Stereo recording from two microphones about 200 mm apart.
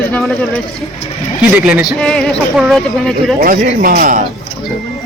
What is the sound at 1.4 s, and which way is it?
Speech, 5° right (ahead or behind).